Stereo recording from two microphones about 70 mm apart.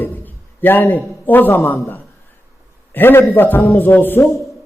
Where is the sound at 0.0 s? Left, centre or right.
Left.